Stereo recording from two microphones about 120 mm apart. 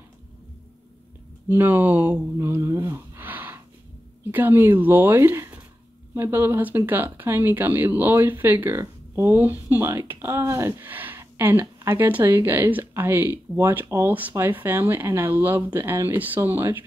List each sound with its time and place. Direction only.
1.5 s speech: 15° right (ahead or behind)